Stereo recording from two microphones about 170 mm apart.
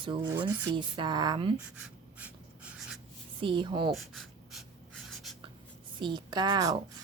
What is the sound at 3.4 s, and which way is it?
Speech, 30° right (ahead or behind).